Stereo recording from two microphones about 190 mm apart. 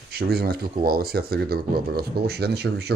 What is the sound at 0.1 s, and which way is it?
Speech, 55° right (ahead or behind).